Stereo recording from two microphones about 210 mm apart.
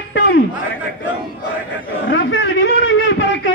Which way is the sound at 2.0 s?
60° left (ahead or behind).